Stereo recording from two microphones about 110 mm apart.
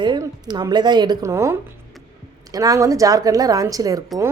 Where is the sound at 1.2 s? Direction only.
25° right (ahead or behind).